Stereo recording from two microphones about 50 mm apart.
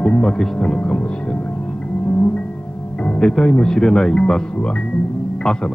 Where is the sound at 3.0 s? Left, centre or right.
Centre.